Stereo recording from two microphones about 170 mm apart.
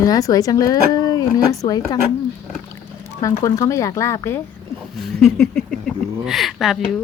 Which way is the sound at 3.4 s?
20° left (ahead or behind).